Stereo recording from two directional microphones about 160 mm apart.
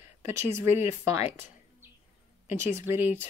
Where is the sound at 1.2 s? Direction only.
15° right (ahead or behind).